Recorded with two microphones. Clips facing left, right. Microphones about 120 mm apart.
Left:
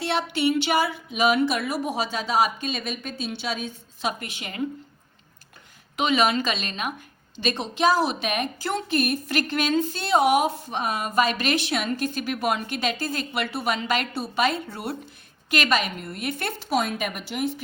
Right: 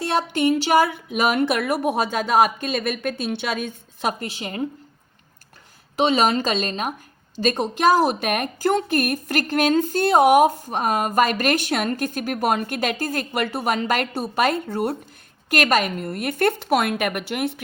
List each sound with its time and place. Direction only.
0.0 s a woman's voice: 45° right (ahead or behind)
4.2 s speech: 35° right (ahead or behind)
6.0 s a woman's voice: 35° right (ahead or behind); by 17.6 s 65° right (ahead or behind)